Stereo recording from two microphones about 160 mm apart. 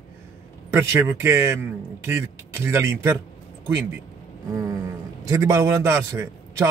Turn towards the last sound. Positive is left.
turn(degrees=-20)  # may be behind; listen again after turning